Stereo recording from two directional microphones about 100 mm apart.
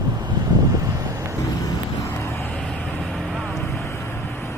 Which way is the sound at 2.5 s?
Centre (ahead or behind).